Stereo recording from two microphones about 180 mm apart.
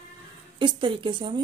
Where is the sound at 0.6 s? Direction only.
25° right (ahead or behind).